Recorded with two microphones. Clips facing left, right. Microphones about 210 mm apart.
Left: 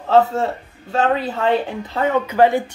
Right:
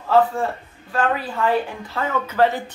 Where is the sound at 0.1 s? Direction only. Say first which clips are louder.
Left 2 dB; 25° left (ahead or behind).